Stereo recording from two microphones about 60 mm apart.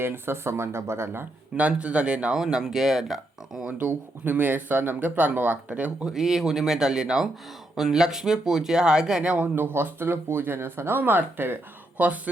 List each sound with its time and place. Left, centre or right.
0.0 s speech: right
1.5 s speech: right
3.8 s speech: right
6.1 s speech: centre
9.6 s speech: right
11.9 s speech: right